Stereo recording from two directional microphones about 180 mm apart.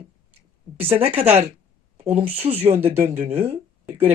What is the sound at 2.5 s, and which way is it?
Speech, 35° right (ahead or behind).